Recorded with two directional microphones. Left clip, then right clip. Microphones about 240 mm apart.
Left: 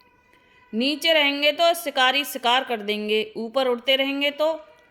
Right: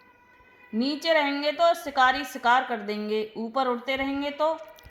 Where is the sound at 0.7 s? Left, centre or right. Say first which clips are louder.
Left 4 dB; left.